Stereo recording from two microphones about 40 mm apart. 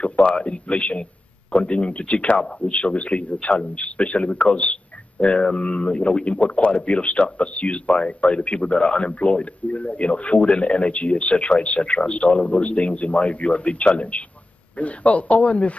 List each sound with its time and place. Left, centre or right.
0.0 s a man's voice: left